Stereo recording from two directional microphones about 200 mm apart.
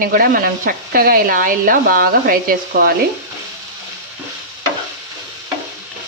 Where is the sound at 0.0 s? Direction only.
45° right (ahead or behind).